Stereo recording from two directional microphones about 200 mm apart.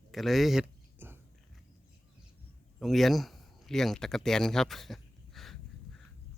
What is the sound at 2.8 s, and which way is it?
Speech, centre (ahead or behind).